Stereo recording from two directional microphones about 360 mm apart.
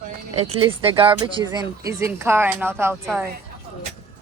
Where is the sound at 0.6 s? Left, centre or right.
Centre.